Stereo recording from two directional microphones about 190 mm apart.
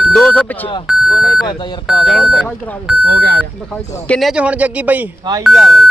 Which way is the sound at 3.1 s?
55° right (ahead or behind).